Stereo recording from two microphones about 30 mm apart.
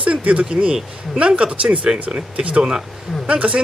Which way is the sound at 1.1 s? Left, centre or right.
Right.